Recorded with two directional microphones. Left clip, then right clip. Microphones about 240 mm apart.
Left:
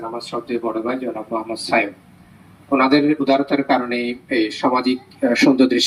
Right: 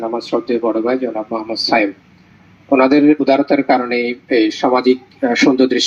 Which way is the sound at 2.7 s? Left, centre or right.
Right.